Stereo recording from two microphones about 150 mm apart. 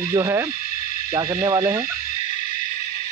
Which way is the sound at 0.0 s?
20° right (ahead or behind).